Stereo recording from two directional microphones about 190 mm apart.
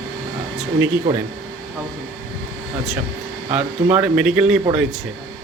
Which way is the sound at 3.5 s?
5° right (ahead or behind).